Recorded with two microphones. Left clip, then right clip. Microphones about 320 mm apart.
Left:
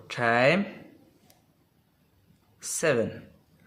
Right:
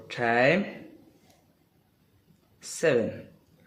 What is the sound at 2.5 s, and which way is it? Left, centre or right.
Speech, left.